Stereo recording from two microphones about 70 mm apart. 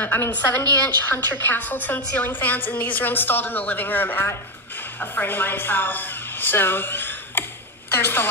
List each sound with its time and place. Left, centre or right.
0.0 s a woman's voice: left